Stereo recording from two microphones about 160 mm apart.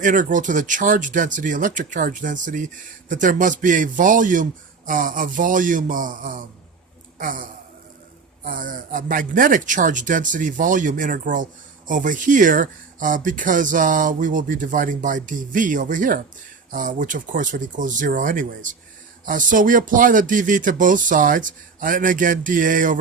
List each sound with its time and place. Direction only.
0.0 s speech: 55° right (ahead or behind)
8.4 s speech: 55° right (ahead or behind)